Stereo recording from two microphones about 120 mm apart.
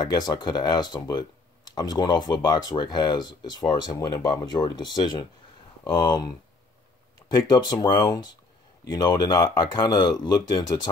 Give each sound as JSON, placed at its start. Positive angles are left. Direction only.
{"t": 0.0, "sound": "speech", "side_deg": 35}
{"t": 7.2, "sound": "speech", "side_deg": 35}